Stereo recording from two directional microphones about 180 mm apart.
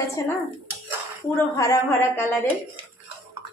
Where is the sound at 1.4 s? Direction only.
15° left (ahead or behind).